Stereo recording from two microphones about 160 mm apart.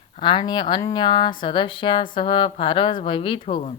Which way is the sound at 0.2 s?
30° left (ahead or behind).